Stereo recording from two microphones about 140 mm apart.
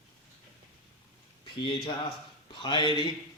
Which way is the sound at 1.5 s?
35° left (ahead or behind).